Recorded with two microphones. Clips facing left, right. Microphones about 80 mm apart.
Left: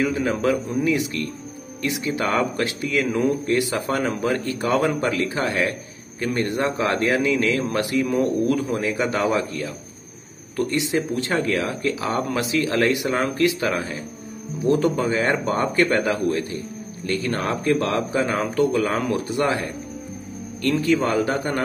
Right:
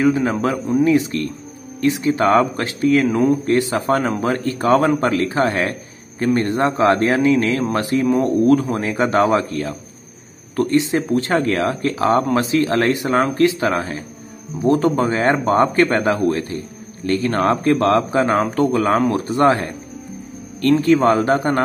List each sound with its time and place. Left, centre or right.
0.0 s a man's voice: right
10.5 s a man's voice: right
20.8 s a man's voice: right